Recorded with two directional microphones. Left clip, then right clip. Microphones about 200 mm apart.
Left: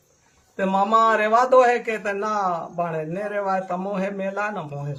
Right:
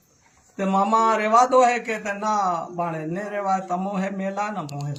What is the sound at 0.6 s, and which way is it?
A man's voice, 15° left (ahead or behind).